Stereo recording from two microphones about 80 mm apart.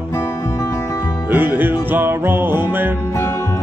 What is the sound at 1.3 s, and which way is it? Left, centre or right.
Music, right.